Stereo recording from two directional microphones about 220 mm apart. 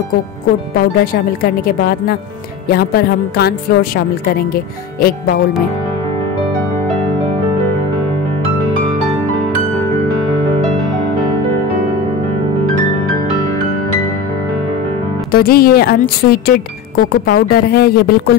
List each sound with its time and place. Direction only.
0.7 s speech: 45° left (ahead or behind)
15.3 s speech: 45° left (ahead or behind)